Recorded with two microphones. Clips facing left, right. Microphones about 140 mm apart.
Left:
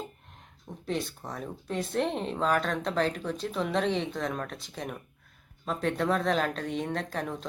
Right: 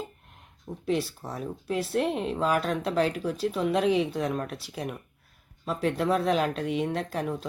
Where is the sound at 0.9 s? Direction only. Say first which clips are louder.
Right 4 dB; 5° right (ahead or behind).